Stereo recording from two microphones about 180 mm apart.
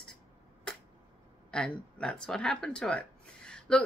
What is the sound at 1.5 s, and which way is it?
Speech, 5° left (ahead or behind).